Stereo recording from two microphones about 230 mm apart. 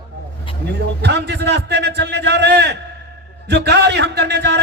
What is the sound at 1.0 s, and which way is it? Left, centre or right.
A man's voice, right.